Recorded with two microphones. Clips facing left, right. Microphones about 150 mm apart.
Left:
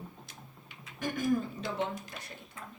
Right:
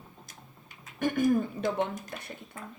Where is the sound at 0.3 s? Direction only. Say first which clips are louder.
Even; 50° right (ahead or behind).